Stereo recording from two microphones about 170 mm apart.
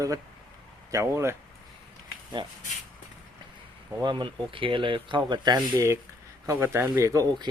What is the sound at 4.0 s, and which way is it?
Speech, 25° right (ahead or behind).